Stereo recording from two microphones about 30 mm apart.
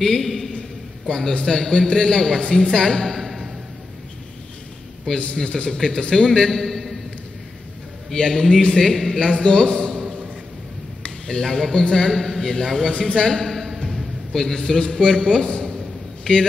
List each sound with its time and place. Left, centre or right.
0.0 s a man's voice: centre
1.0 s a man's voice: left
3.2 s a sound: centre
5.4 s a man's voice: left
5.8 s a man's voice: centre
8.4 s a man's voice: centre
9.3 s a man's voice: left
11.2 s a man's voice: centre
13.3 s a sound: centre
14.3 s a man's voice: centre
14.7 s speech: left